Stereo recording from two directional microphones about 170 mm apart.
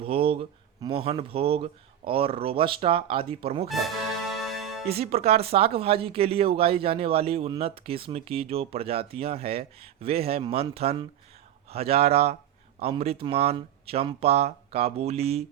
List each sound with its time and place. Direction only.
0.0 s speech: 35° right (ahead or behind)
4.4 s music: centre (ahead or behind)
4.9 s speech: 35° right (ahead or behind)